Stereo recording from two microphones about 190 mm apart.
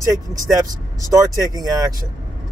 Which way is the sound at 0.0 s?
15° right (ahead or behind).